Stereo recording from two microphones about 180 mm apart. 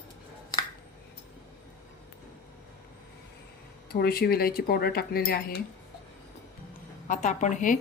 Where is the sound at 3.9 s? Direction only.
60° left (ahead or behind).